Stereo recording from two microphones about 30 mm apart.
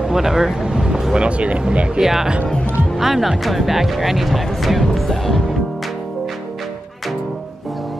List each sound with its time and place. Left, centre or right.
0.1 s speech: centre
0.7 s a sound: right
1.1 s speech: right
2.0 s speech: centre
4.9 s music: centre